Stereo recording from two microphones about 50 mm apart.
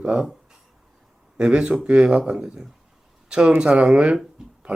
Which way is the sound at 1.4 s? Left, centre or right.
Right.